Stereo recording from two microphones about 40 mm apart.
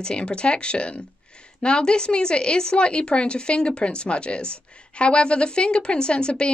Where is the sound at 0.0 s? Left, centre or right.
Left.